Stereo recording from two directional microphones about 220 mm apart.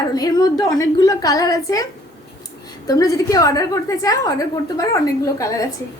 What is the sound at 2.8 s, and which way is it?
A woman's voice, 15° left (ahead or behind).